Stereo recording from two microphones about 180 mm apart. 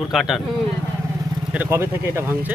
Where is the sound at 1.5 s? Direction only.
10° right (ahead or behind).